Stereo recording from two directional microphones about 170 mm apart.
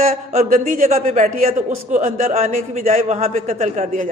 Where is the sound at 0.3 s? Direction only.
50° right (ahead or behind).